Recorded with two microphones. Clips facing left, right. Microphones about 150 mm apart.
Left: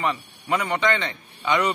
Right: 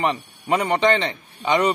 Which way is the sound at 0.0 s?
30° right (ahead or behind).